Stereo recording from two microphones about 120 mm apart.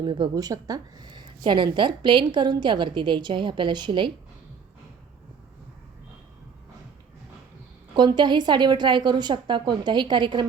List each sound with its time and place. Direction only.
0.0 s speech: 40° right (ahead or behind)
7.9 s speech: 40° right (ahead or behind)